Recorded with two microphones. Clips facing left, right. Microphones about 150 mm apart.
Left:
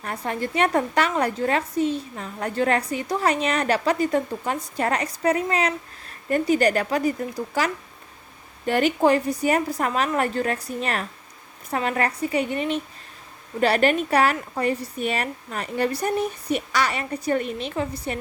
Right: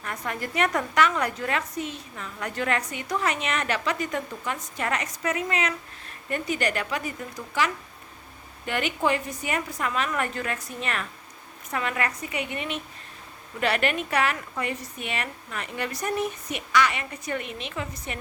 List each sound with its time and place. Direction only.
0.0 s a woman's voice: 35° left (ahead or behind)